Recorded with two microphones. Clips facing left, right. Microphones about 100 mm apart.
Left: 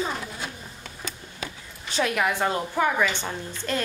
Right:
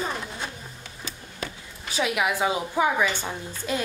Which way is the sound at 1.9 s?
5° right (ahead or behind).